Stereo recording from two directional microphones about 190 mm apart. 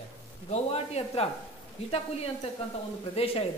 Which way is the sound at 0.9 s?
30° left (ahead or behind).